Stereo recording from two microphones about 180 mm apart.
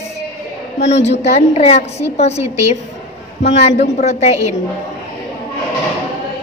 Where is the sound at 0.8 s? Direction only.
35° left (ahead or behind).